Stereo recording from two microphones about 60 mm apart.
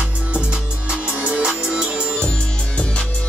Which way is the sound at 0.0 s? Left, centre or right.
Right.